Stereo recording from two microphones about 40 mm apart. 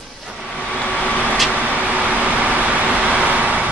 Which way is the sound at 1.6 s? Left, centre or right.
Right.